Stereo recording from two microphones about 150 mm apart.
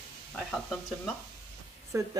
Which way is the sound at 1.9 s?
20° right (ahead or behind).